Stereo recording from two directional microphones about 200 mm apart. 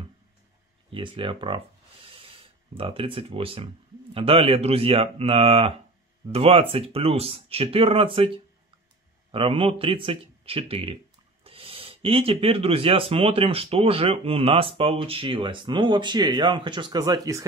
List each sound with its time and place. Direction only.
0.8 s speech: 25° right (ahead or behind)
2.0 s a sound: 25° right (ahead or behind)
4.1 s speech: 30° right (ahead or behind)
9.3 s speech: 25° right (ahead or behind)